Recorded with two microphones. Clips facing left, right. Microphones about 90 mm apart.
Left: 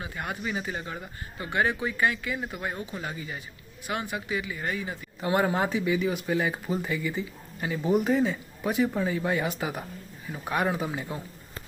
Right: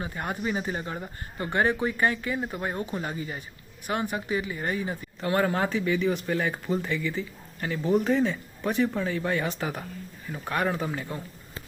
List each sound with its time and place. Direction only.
0.0 s speech: 35° right (ahead or behind)
5.2 s speech: 15° left (ahead or behind)